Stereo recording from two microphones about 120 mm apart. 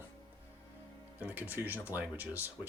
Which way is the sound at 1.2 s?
15° right (ahead or behind).